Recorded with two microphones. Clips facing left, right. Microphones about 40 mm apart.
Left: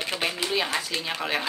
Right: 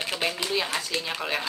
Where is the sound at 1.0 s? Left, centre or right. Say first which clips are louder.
Left 1 dB; centre.